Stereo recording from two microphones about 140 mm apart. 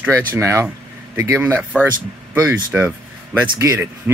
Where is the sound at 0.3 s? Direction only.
20° right (ahead or behind).